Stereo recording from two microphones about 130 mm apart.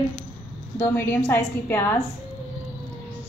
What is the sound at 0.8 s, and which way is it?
A woman's voice, 15° left (ahead or behind).